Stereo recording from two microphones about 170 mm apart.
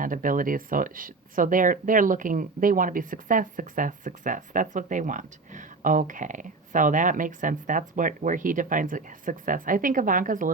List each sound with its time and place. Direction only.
0.0 s speech: 55° right (ahead or behind)